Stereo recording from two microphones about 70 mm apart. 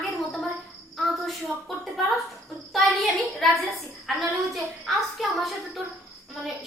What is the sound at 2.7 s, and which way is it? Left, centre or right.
A woman's voice, centre.